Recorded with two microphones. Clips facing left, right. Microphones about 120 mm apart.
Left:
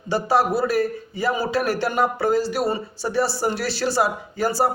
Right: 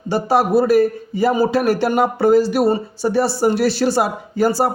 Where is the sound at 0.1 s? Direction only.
55° right (ahead or behind).